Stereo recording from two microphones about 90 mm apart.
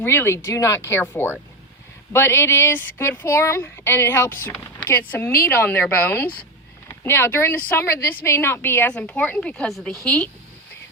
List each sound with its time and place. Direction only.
0.0 s speech: 25° left (ahead or behind)
0.9 s speech: 25° left (ahead or behind)
8.9 s speech: 15° left (ahead or behind)